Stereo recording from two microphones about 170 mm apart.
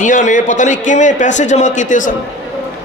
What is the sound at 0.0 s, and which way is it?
A man's voice, 50° left (ahead or behind).